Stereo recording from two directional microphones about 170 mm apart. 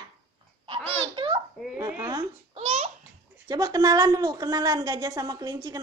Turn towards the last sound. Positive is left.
turn(degrees=-20)  # may be behind; listen again after turning